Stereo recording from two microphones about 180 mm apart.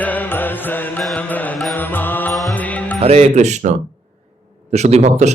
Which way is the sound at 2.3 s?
5° left (ahead or behind).